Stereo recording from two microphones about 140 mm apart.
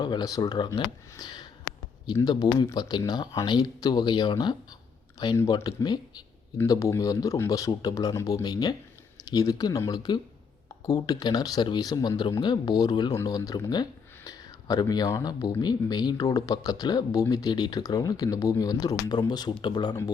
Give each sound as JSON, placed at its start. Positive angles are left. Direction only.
{"t": 0.0, "sound": "speech", "side_deg": 30}